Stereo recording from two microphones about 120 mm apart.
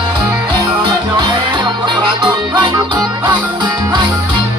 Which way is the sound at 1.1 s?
40° right (ahead or behind).